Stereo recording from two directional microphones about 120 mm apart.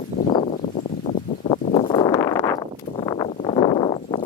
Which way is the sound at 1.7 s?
45° left (ahead or behind).